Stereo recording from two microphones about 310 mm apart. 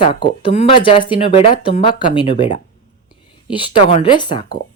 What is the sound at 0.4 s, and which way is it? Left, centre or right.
A woman's voice, centre.